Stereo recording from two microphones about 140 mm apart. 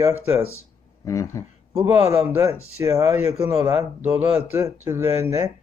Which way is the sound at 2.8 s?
20° right (ahead or behind).